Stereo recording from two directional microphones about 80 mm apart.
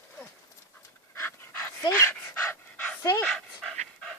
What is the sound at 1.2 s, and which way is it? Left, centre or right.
Dog, left.